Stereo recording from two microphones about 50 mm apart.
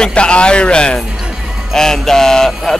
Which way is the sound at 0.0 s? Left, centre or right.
Left.